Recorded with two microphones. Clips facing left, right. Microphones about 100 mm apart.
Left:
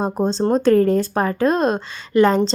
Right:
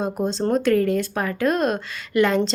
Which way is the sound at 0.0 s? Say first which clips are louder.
Left 4 dB; 35° left (ahead or behind).